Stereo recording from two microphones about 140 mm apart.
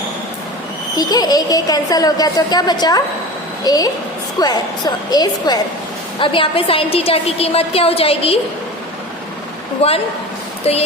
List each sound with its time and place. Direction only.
0.9 s a woman's voice: 25° left (ahead or behind); by 8.4 s 45° left (ahead or behind)
9.8 s a woman's voice: 45° left (ahead or behind)